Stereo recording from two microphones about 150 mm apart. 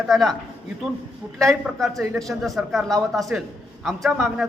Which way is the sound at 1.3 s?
Centre (ahead or behind).